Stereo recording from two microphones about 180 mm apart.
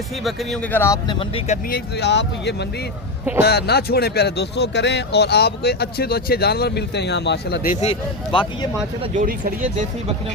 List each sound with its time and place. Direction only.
0.3 s speech: centre (ahead or behind)
1.7 s speech: 70° left (ahead or behind)
7.7 s speech: 35° left (ahead or behind)
9.2 s speech: 45° right (ahead or behind)